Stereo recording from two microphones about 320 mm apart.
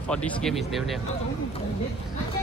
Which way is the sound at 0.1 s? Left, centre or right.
Centre.